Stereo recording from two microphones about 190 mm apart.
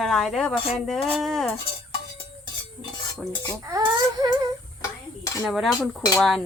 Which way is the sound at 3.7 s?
20° right (ahead or behind).